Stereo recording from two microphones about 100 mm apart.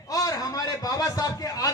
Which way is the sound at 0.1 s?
35° left (ahead or behind).